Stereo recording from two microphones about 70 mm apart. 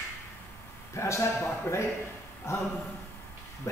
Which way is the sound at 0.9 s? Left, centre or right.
Left.